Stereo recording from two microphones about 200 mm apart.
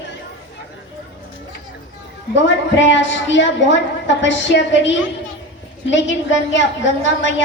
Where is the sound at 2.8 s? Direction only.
65° left (ahead or behind).